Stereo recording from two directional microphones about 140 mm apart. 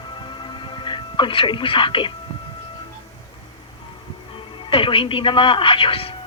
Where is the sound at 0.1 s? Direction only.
35° left (ahead or behind).